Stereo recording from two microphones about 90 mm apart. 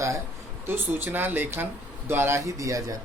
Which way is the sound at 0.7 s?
25° right (ahead or behind).